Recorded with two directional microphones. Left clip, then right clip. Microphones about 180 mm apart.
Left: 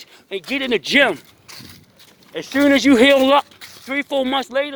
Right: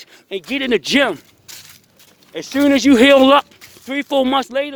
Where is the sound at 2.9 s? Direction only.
40° right (ahead or behind).